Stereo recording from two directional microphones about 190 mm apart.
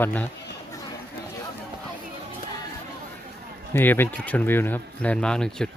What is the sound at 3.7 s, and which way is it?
Speech, 10° left (ahead or behind).